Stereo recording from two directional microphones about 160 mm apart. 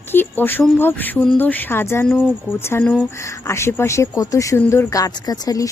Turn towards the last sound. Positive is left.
turn(degrees=25)  # may be behind; listen again after turning